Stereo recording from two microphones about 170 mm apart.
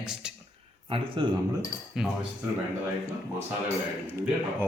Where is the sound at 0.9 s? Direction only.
30° right (ahead or behind).